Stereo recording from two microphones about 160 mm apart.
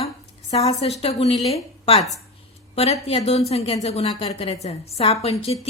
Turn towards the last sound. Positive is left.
turn(degrees=40)  # may be behind; listen again after turning